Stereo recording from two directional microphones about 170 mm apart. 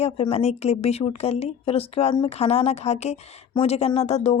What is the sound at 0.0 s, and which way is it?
Speech, 35° left (ahead or behind).